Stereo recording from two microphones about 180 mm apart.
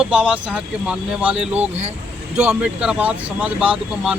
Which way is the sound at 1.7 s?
40° right (ahead or behind).